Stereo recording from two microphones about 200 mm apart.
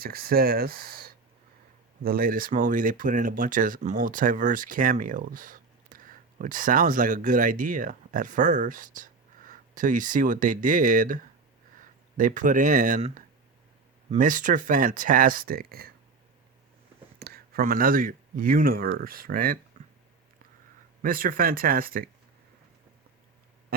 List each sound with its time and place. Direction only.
0.0 s speech: 50° right (ahead or behind)
17.2 s speech: 50° right (ahead or behind)
19.8 s a sound: 45° right (ahead or behind)
21.0 s speech: 45° right (ahead or behind)